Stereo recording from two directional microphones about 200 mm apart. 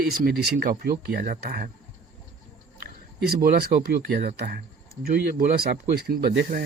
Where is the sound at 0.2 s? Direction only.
50° right (ahead or behind).